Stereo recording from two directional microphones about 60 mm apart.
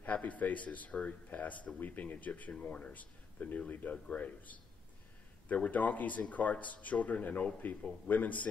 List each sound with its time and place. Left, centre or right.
0.0 s a man's voice: left